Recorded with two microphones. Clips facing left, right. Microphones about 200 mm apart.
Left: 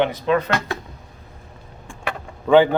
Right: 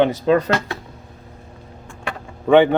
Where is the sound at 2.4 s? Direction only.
25° right (ahead or behind).